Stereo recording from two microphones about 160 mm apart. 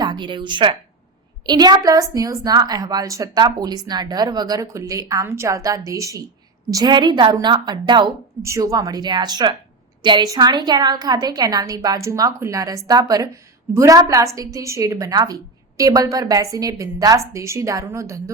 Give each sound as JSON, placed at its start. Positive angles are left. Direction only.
{"t": 0.0, "sound": "a woman's voice", "side_deg": -30}